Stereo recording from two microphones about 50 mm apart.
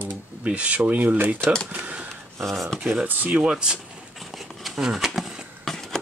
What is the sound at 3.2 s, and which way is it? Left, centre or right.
Speech, right.